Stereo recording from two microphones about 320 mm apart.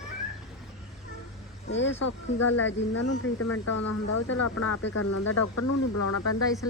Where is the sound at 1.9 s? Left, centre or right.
Left.